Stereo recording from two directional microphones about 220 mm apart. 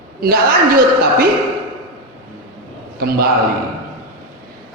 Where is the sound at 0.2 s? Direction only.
45° right (ahead or behind).